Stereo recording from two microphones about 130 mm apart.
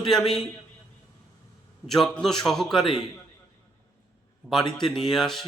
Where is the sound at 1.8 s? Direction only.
Centre (ahead or behind).